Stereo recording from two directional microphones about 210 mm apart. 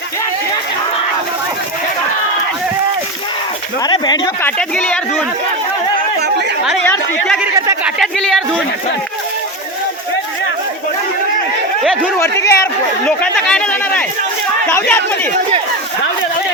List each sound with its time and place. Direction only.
3.8 s speech: 20° left (ahead or behind)
4.4 s speech: 5° left (ahead or behind)
6.8 s speech: 10° left (ahead or behind)
7.7 s speech: 5° right (ahead or behind)
11.8 s speech: centre (ahead or behind)
12.2 s speech: 15° left (ahead or behind)